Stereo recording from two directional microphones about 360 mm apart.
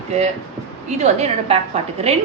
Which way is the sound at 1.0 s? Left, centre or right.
Centre.